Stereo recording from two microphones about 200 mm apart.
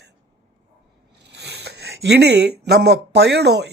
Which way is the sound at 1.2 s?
60° right (ahead or behind).